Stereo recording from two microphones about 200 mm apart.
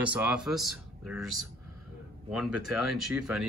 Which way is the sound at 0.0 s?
5° right (ahead or behind).